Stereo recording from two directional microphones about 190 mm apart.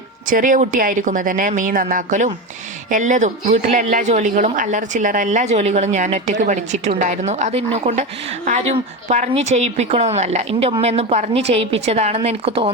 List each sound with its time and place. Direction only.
0.3 s a woman's voice: 45° right (ahead or behind)